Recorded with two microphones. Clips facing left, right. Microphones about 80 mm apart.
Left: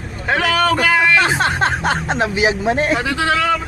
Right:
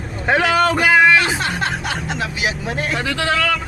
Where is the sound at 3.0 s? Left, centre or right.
Centre.